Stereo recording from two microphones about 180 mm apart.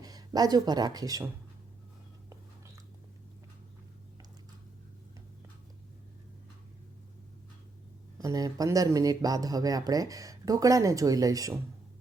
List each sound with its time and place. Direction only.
0.0 s speech: 20° right (ahead or behind)
8.2 s speech: 20° right (ahead or behind)